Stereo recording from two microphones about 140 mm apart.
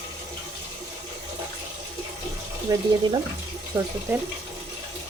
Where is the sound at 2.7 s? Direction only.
25° right (ahead or behind).